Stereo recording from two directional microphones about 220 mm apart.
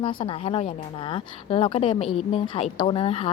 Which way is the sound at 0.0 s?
25° left (ahead or behind).